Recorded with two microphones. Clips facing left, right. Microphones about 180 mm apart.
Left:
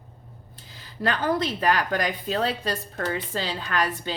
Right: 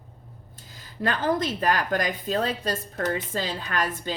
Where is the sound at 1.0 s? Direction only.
50° right (ahead or behind).